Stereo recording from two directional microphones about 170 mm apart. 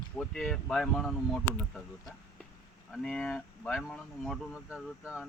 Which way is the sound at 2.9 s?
Centre (ahead or behind).